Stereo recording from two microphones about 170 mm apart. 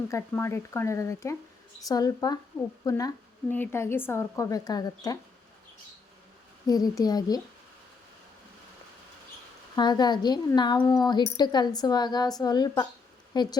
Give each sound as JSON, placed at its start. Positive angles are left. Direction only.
{"t": 0.1, "sound": "a woman's voice", "side_deg": 15}
{"t": 6.7, "sound": "speech", "side_deg": 20}
{"t": 9.7, "sound": "speech", "side_deg": 25}